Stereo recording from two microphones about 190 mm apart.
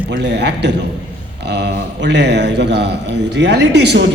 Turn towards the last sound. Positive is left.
turn(degrees=-65)  # may be behind; listen again after turning